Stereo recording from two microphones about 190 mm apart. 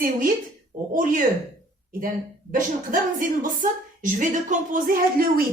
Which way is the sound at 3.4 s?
45° right (ahead or behind).